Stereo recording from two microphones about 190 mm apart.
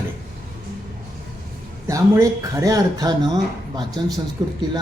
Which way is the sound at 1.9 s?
15° right (ahead or behind).